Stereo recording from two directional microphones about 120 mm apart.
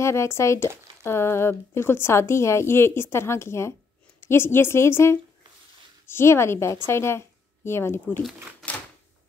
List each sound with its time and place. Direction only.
0.0 s speech: 25° left (ahead or behind)